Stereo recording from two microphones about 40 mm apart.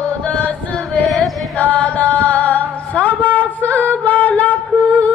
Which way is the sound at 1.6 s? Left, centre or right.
Left.